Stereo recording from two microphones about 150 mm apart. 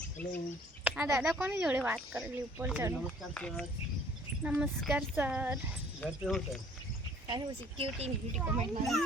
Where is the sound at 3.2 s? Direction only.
5° left (ahead or behind).